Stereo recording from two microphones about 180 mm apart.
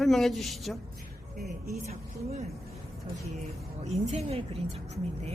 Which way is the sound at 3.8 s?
40° right (ahead or behind).